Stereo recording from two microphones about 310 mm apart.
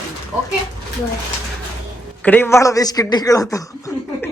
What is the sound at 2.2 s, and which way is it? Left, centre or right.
Speech, centre.